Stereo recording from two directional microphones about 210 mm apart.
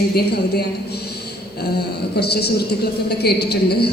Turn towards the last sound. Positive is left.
turn(degrees=50)  # may be behind; listen again after turning